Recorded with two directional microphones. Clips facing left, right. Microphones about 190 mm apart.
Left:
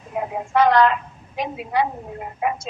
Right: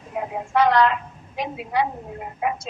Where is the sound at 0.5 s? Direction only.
45° left (ahead or behind).